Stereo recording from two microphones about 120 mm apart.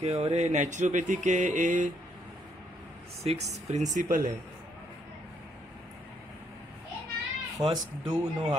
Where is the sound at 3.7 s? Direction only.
90° right.